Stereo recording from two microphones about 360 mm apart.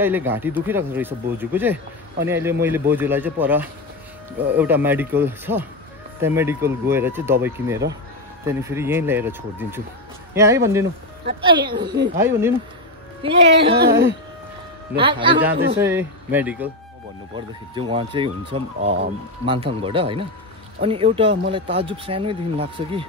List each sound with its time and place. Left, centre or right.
0.0 s speech: centre
13.7 s a man's voice: right
15.0 s speech: centre
15.5 s a man's voice: right
15.8 s speech: centre
17.7 s speech: centre